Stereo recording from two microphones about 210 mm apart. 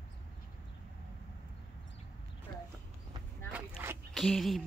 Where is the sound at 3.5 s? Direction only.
10° right (ahead or behind).